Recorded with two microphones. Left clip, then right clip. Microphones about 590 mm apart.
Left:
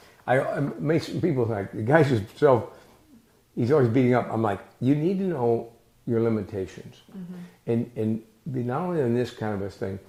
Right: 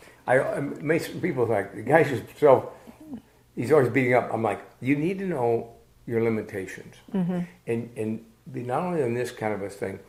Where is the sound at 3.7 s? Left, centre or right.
Left.